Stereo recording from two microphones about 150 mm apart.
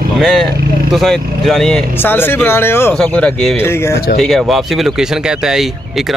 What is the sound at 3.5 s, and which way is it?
Speech, 15° left (ahead or behind).